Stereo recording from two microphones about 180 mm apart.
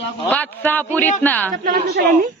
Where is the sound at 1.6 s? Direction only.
60° right (ahead or behind).